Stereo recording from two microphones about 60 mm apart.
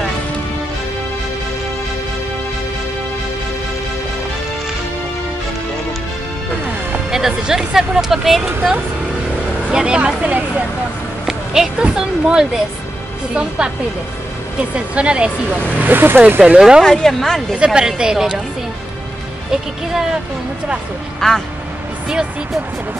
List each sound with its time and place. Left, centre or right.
7.1 s speech: centre
11.2 s a sound: centre
11.8 s speech: centre
15.8 s speech: right
16.3 s speech: centre
16.8 s speech: centre
17.6 s speech: centre
19.5 s speech: centre
21.2 s speech: centre